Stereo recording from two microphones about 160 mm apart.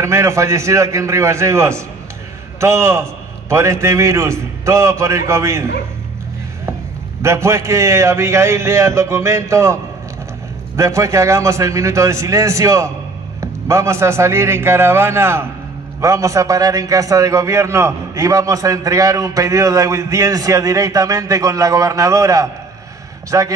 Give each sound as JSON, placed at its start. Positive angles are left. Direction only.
{"t": 0.0, "sound": "a man's voice", "side_deg": -20}
{"t": 7.2, "sound": "a man's voice", "side_deg": -20}
{"t": 10.8, "sound": "a man's voice", "side_deg": -20}